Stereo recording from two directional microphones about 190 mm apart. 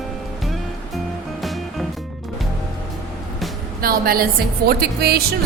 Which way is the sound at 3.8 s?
50° right (ahead or behind).